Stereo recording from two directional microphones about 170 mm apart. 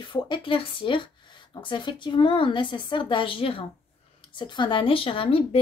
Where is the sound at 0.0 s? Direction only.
25° left (ahead or behind).